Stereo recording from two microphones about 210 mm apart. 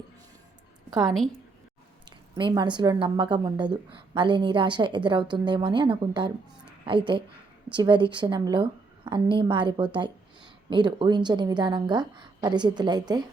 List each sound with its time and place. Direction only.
1.0 s a woman's voice: centre (ahead or behind)
2.0 s a sound: 20° right (ahead or behind)
2.7 s a woman's voice: 20° right (ahead or behind)